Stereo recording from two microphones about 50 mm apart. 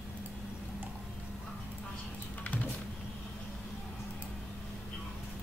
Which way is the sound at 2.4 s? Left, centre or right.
Left.